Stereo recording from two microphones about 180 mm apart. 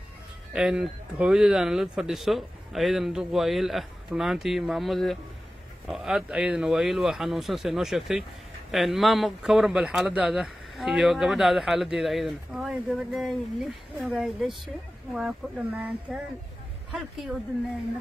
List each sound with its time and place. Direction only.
0.5 s speech: 5° right (ahead or behind)